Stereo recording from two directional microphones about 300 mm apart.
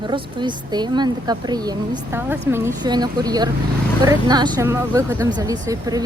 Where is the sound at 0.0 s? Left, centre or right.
Centre.